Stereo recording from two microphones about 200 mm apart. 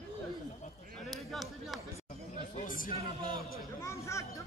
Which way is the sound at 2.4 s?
40° left (ahead or behind).